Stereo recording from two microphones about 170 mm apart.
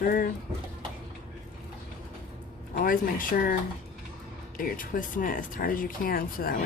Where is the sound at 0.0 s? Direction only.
55° left (ahead or behind).